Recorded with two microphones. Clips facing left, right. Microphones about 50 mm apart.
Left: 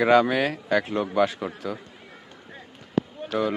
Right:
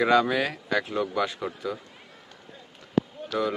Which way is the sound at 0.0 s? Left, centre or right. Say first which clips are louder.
Left 3 dB; left.